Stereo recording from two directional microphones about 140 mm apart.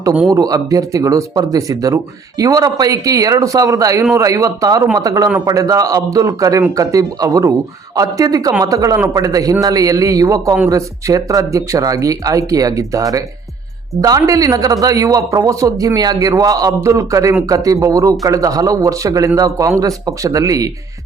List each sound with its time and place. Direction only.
0.3 s speech: 25° right (ahead or behind)